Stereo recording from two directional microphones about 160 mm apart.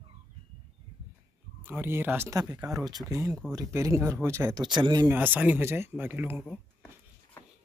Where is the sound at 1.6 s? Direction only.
15° right (ahead or behind).